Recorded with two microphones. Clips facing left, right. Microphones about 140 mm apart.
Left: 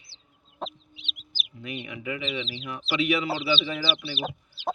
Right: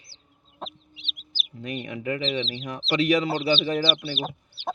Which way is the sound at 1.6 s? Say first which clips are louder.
Right 4 dB; 40° right (ahead or behind).